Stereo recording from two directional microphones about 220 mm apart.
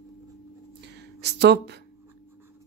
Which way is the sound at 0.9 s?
50° right (ahead or behind).